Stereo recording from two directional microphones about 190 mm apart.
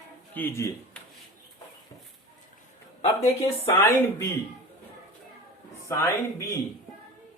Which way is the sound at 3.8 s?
15° left (ahead or behind).